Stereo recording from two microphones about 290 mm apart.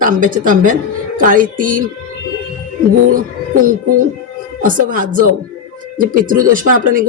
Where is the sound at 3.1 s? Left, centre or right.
Right.